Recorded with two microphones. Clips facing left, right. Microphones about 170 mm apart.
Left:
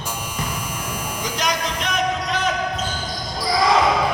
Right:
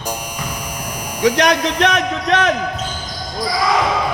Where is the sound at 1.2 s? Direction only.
70° right (ahead or behind).